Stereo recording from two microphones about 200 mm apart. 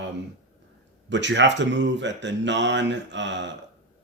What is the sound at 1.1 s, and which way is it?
Speech, 60° right (ahead or behind).